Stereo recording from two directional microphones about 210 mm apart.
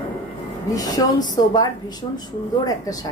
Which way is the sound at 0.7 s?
20° left (ahead or behind).